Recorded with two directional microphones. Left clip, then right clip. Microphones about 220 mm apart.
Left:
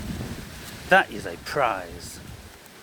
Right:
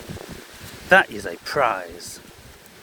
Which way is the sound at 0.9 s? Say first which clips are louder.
Right 3 dB; 25° right (ahead or behind).